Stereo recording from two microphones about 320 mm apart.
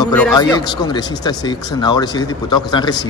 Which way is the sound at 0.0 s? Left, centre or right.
Centre.